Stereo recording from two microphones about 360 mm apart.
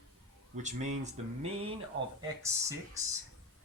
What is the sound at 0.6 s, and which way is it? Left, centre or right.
Speech, centre.